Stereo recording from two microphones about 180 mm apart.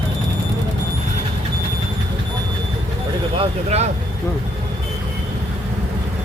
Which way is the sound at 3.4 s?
35° right (ahead or behind).